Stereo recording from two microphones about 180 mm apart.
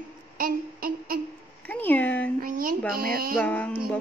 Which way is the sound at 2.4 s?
50° right (ahead or behind).